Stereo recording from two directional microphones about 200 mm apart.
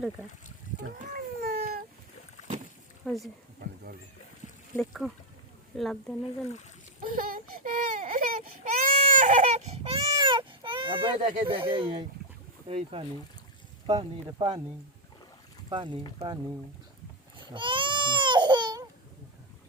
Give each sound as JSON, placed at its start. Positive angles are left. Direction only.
{"t": 0.9, "sound": "a sound", "side_deg": -50}
{"t": 3.1, "sound": "speech", "side_deg": 5}
{"t": 4.8, "sound": "speech", "side_deg": 0}
{"t": 7.0, "sound": "speech", "side_deg": -45}
{"t": 15.7, "sound": "speech", "side_deg": -25}
{"t": 17.3, "sound": "baby cry", "side_deg": -25}